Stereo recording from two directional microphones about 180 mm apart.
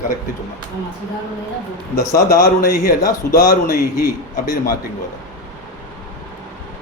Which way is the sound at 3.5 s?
55° left (ahead or behind).